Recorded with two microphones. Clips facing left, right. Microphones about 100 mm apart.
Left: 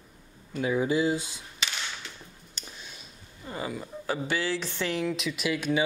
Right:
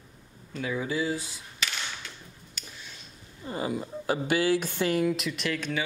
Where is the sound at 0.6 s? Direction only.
25° left (ahead or behind).